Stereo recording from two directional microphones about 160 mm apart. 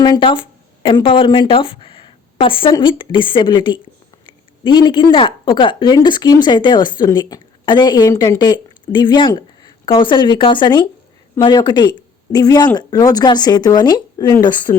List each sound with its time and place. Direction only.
0.0 s speech: 30° left (ahead or behind)